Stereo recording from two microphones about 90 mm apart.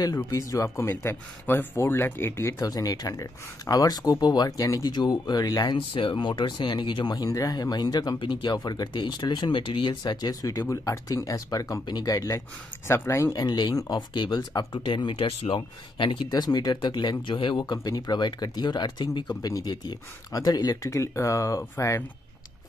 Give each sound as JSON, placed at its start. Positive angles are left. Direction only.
{"t": 0.0, "sound": "speech", "side_deg": 40}
{"t": 5.8, "sound": "speech", "side_deg": 70}
{"t": 12.8, "sound": "speech", "side_deg": 30}
{"t": 13.3, "sound": "speech", "side_deg": 50}
{"t": 16.3, "sound": "speech", "side_deg": 45}